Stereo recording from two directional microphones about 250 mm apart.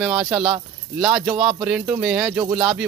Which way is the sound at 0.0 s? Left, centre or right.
Centre.